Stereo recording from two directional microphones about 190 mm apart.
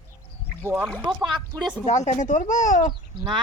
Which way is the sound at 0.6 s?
15° right (ahead or behind).